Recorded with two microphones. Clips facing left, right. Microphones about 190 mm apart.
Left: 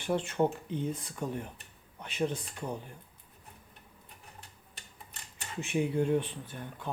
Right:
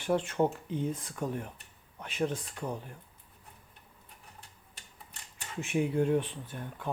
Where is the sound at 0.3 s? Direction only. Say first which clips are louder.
Even; centre (ahead or behind).